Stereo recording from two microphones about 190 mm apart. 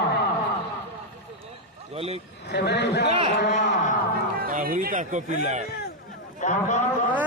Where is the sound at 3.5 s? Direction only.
40° left (ahead or behind).